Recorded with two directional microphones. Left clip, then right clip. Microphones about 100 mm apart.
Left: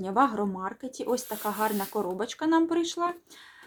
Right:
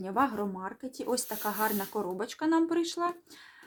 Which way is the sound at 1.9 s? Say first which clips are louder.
Left 3 dB; 20° left (ahead or behind).